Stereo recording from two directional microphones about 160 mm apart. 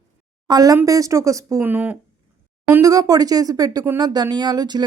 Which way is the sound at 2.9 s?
20° right (ahead or behind).